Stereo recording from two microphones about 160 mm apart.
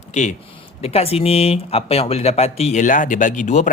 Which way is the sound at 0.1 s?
45° left (ahead or behind).